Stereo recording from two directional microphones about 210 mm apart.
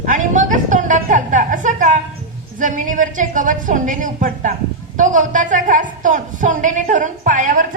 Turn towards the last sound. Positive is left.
turn(degrees=-40)  # may be behind; listen again after turning